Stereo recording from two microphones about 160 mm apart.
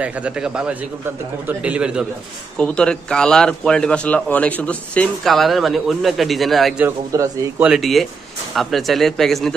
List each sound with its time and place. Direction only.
0.0 s a man's voice: 10° right (ahead or behind)
2.5 s a man's voice: 5° left (ahead or behind)
7.1 s speech: 20° right (ahead or behind)
7.6 s a man's voice: centre (ahead or behind)